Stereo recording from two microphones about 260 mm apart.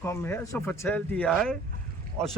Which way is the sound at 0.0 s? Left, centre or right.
Centre.